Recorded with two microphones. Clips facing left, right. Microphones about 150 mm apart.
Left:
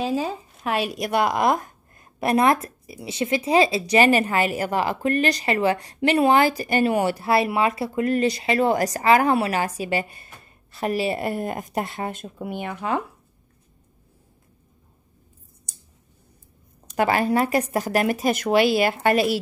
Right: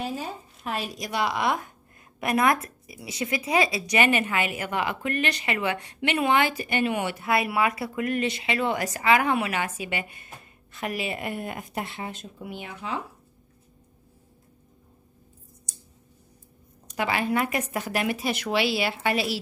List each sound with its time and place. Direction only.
0.0 s a woman's voice: 90° left; by 1.7 s 40° left (ahead or behind)
2.1 s speech: 30° left (ahead or behind); by 13.0 s 55° left (ahead or behind)
16.9 s speech: 45° left (ahead or behind)